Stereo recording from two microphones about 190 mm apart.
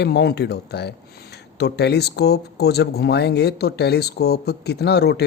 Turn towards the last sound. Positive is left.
turn(degrees=60)  # may be behind; listen again after turning